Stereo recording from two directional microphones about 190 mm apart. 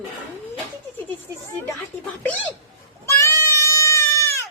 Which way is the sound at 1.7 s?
5° left (ahead or behind).